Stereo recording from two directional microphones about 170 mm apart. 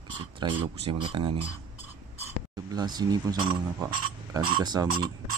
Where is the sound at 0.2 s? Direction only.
30° right (ahead or behind).